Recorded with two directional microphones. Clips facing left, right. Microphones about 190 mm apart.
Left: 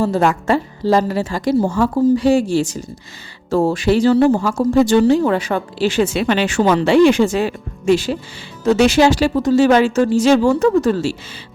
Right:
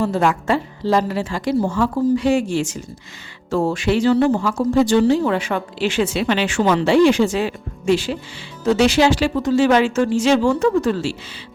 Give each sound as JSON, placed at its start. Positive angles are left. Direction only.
{"t": 0.0, "sound": "speech", "side_deg": 40}
{"t": 6.8, "sound": "speech", "side_deg": 60}